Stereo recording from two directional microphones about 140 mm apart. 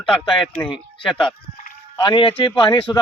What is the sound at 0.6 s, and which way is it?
Speech, 35° left (ahead or behind).